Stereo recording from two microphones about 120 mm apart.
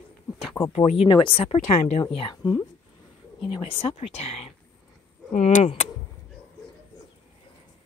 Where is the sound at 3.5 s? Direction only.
50° left (ahead or behind).